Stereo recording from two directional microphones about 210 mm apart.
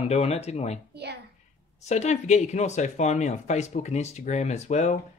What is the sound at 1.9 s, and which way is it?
Speech, 35° left (ahead or behind).